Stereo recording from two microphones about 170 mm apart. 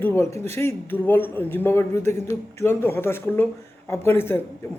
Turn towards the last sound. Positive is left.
turn(degrees=15)  # may be behind; listen again after turning